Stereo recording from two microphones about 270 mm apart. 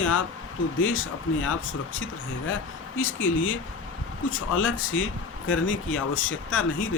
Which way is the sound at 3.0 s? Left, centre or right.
Left.